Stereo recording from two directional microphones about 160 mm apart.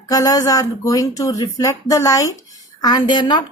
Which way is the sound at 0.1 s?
20° left (ahead or behind).